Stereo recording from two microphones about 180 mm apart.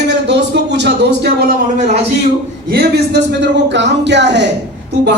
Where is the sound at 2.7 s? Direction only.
75° right (ahead or behind).